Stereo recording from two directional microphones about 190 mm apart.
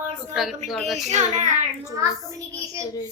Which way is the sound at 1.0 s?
40° right (ahead or behind).